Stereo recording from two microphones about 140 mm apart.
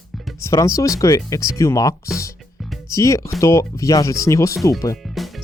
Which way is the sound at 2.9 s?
20° left (ahead or behind).